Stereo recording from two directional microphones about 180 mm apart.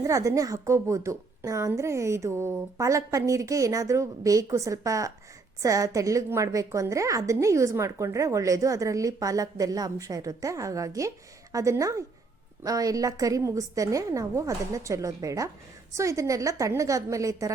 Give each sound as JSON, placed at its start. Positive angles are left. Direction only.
{"t": 0.0, "sound": "a woman's voice", "side_deg": -20}